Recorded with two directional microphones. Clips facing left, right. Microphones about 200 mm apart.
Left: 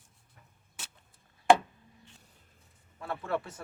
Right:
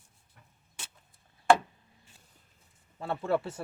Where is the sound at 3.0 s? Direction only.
30° right (ahead or behind).